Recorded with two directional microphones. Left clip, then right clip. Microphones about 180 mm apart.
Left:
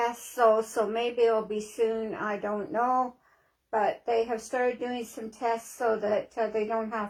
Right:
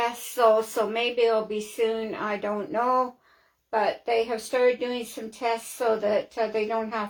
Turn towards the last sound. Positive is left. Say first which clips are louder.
# right 2 dB
turn(degrees=-25)  # may be behind; listen again after turning